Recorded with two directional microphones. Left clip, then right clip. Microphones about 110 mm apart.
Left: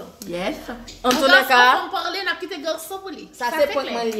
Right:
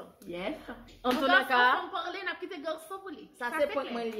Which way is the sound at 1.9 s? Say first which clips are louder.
Left 11 dB; 15° right (ahead or behind).